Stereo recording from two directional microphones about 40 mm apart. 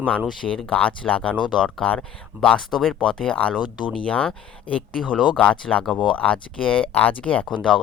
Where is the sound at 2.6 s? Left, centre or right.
Centre.